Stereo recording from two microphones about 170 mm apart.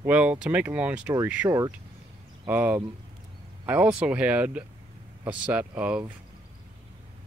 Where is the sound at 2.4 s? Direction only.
10° right (ahead or behind).